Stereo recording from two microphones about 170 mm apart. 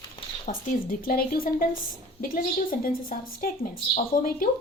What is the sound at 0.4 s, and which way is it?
Speech, 55° left (ahead or behind).